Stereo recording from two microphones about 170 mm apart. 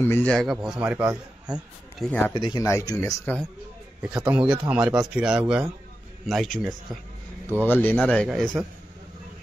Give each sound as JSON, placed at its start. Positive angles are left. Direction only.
{"t": 0.0, "sound": "a man's voice", "side_deg": 10}
{"t": 2.0, "sound": "speech", "side_deg": 10}
{"t": 2.3, "sound": "speech", "side_deg": 25}
{"t": 4.0, "sound": "a man's voice", "side_deg": -5}
{"t": 7.6, "sound": "speech", "side_deg": 10}